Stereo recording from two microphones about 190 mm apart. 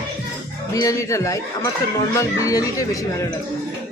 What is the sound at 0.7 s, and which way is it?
Speech, 15° left (ahead or behind).